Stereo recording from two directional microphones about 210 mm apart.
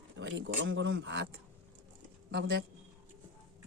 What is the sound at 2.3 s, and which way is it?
Speech, 55° right (ahead or behind).